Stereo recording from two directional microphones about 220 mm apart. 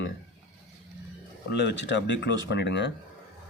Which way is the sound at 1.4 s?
50° left (ahead or behind).